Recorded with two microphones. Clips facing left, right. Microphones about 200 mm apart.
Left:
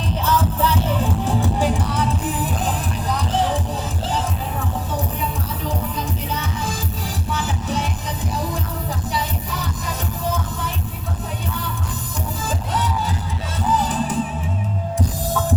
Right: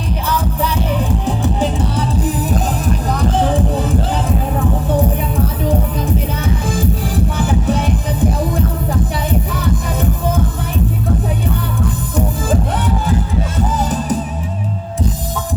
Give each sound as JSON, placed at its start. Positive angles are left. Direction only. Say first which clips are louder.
{"t": 0.1, "sound": "music", "louder": "even", "side_deg": -15}
{"t": 2.2, "sound": "music", "louder": "right 5 dB", "side_deg": -40}
{"t": 7.3, "sound": "music", "louder": "right 6 dB", "side_deg": -55}
{"t": 12.1, "sound": "music", "louder": "right 10 dB", "side_deg": -55}